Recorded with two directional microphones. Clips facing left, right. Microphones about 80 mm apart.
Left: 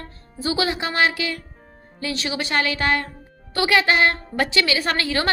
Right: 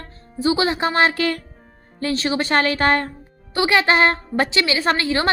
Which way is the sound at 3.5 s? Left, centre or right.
Right.